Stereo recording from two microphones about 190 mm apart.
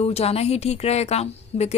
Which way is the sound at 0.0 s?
30° left (ahead or behind).